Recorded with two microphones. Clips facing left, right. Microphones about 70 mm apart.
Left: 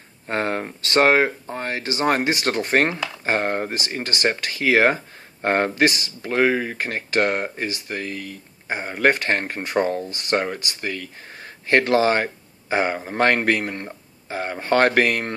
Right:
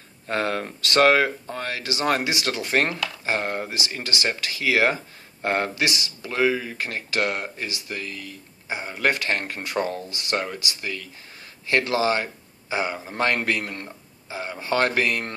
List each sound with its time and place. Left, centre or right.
0.3 s speech: left